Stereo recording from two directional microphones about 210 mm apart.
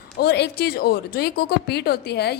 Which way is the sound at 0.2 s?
50° left (ahead or behind).